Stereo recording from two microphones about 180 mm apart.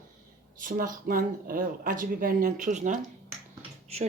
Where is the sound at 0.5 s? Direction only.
50° right (ahead or behind).